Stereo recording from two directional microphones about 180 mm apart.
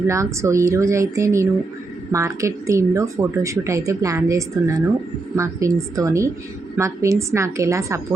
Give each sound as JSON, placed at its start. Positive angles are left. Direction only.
{"t": 0.1, "sound": "speech", "side_deg": -15}